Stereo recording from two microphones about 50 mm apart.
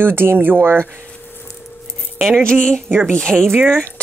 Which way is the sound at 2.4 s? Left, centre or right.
Centre.